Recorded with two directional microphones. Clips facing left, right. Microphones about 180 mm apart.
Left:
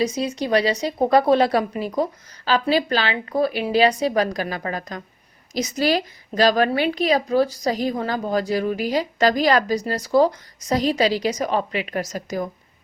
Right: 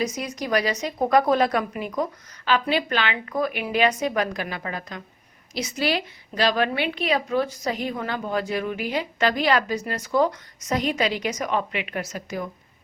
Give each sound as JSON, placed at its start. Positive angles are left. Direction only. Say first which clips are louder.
{"t": 0.0, "sound": "a woman's voice", "louder": "left 5 dB", "side_deg": 30}